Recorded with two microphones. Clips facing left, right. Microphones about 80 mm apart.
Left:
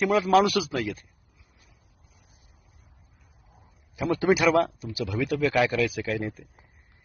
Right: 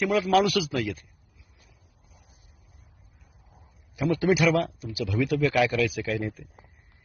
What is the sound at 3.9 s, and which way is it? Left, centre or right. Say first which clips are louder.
Speech: even; left.